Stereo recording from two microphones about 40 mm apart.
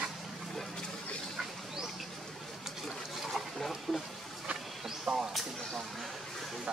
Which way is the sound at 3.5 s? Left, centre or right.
Centre.